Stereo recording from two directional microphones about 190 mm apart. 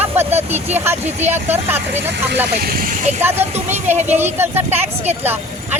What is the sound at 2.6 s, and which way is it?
Speech, 50° right (ahead or behind).